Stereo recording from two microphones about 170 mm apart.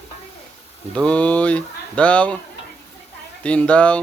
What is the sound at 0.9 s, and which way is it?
Speech, 5° left (ahead or behind).